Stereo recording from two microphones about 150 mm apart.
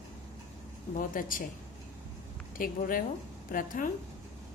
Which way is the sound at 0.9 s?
65° left (ahead or behind).